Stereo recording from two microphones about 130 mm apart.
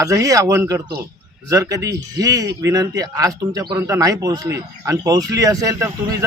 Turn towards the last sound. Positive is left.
turn(degrees=-25)  # may be behind; listen again after turning